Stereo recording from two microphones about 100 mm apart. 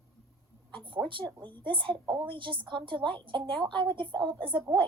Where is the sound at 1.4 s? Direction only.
20° left (ahead or behind).